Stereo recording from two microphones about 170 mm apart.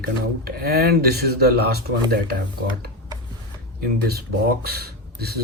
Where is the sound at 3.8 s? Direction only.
65° right (ahead or behind).